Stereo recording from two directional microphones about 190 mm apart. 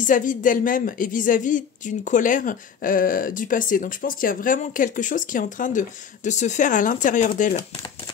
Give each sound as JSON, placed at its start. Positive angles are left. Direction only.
{"t": 0.0, "sound": "a woman's voice", "side_deg": 45}